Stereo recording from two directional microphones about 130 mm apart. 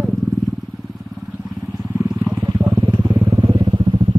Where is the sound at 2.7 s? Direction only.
25° right (ahead or behind).